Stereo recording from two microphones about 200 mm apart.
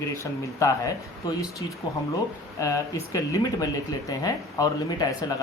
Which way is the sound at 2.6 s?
15° left (ahead or behind).